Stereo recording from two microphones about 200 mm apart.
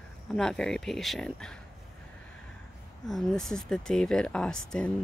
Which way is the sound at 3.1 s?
Centre (ahead or behind).